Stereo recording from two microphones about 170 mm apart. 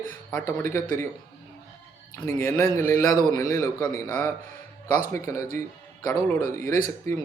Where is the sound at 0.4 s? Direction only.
15° left (ahead or behind).